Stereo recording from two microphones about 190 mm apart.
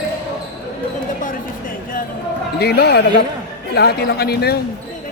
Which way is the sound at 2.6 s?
60° left (ahead or behind).